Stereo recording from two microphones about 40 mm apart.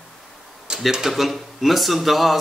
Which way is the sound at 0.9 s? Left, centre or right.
Centre.